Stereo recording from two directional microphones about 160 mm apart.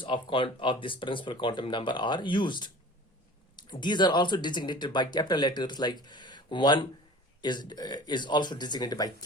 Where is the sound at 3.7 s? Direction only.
30° left (ahead or behind).